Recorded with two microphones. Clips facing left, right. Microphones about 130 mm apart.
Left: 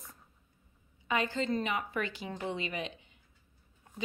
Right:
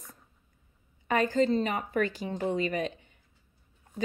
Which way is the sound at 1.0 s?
45° right (ahead or behind).